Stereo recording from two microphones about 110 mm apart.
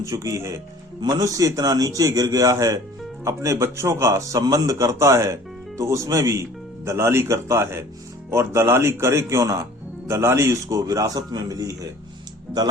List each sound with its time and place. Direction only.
0.0 s a man's voice: 30° right (ahead or behind)